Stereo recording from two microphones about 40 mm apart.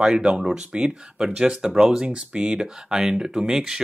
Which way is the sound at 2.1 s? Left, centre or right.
Right.